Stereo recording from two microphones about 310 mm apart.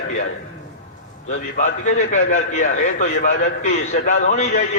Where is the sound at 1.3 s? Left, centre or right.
Left.